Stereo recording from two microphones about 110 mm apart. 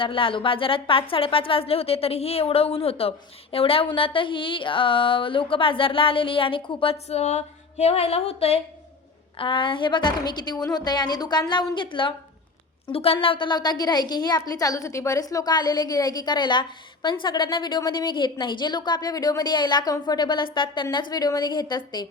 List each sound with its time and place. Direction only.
0.0 s speech: 55° left (ahead or behind)
9.4 s a woman's voice: 50° left (ahead or behind)
12.9 s a woman's voice: 60° left (ahead or behind); by 22.0 s 40° left (ahead or behind)